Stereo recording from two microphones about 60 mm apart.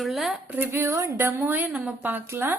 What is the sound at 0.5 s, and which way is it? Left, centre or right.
A woman's voice, right.